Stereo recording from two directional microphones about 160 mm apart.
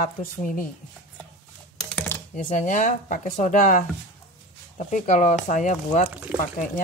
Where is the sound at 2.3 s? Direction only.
50° left (ahead or behind).